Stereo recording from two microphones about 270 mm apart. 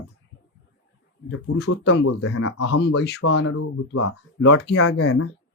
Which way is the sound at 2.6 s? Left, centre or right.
Left.